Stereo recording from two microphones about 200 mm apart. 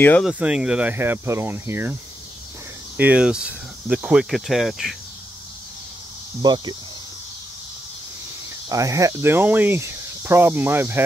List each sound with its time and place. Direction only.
0.0 s speech: 10° left (ahead or behind)
0.3 s speech: 5° right (ahead or behind)
3.0 s speech: 5° right (ahead or behind)
6.4 s speech: 20° right (ahead or behind)
8.6 s speech: 15° right (ahead or behind)